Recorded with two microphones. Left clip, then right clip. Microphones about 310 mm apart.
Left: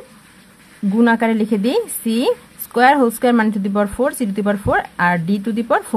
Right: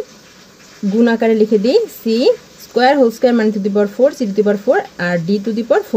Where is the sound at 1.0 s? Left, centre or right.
Left.